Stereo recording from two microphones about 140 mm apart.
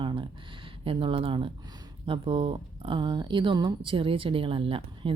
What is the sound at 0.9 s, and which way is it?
Speech, 40° right (ahead or behind).